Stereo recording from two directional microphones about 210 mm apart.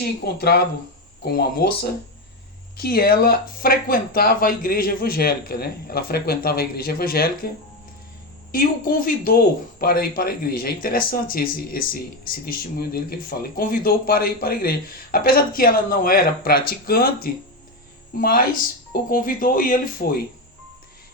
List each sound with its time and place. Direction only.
0.0 s speech: 50° left (ahead or behind)
8.5 s speech: 40° left (ahead or behind)